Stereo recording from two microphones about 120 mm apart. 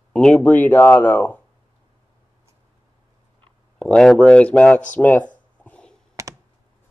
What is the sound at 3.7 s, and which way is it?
Speech, 10° left (ahead or behind).